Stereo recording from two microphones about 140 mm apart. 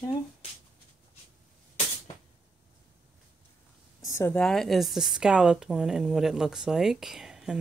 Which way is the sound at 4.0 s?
20° left (ahead or behind).